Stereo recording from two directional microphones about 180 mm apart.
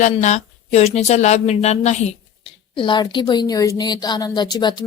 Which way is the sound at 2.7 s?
25° left (ahead or behind).